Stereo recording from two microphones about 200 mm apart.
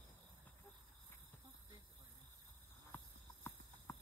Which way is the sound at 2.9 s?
10° left (ahead or behind).